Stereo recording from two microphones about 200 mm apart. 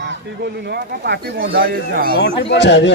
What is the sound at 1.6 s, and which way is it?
Speech, 45° right (ahead or behind).